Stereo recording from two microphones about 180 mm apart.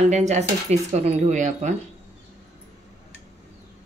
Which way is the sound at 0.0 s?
40° right (ahead or behind).